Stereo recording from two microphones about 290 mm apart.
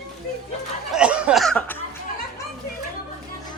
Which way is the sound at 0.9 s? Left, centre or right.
Centre.